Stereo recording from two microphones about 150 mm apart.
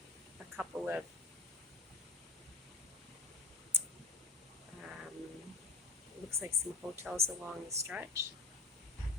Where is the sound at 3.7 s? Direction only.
15° right (ahead or behind).